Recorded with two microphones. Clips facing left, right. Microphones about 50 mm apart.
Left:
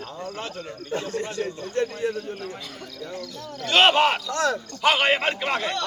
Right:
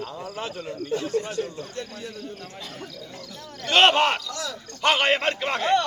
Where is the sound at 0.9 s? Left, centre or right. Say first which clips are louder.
Right 2 dB; left.